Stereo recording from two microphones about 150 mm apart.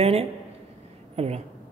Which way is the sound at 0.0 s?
45° right (ahead or behind).